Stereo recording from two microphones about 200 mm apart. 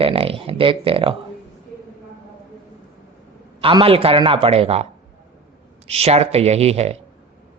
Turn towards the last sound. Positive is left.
turn(degrees=-30)  # may be behind; listen again after turning